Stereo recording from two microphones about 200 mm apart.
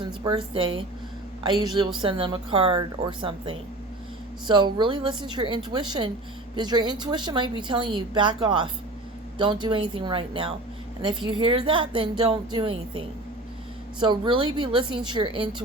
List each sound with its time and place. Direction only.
0.0 s a woman's voice: 25° right (ahead or behind)
14.0 s a woman's voice: 25° right (ahead or behind)